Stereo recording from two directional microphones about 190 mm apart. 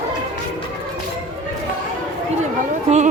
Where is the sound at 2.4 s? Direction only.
35° right (ahead or behind).